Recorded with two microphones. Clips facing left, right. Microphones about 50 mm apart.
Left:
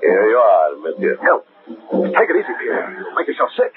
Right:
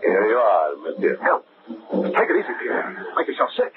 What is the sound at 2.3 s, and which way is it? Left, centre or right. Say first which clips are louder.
Speech: left 4 dB; centre.